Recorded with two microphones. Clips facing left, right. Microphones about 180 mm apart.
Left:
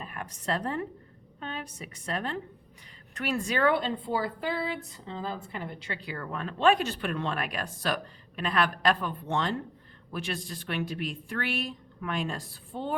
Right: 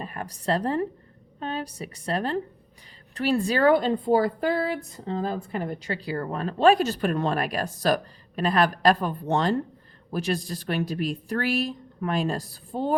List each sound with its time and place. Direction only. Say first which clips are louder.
0.0 s a woman's voice: right 5 dB; 35° right (ahead or behind)